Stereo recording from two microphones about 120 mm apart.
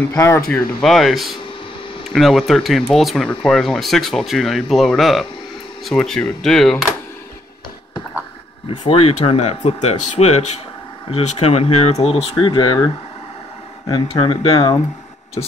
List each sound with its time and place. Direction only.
0.1 s speech: 20° left (ahead or behind)
0.5 s speech: 5° left (ahead or behind)
8.6 s speech: 50° left (ahead or behind)
12.4 s speech: 40° left (ahead or behind)